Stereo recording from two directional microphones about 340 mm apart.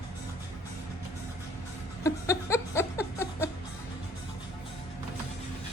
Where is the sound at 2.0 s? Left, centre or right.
Centre.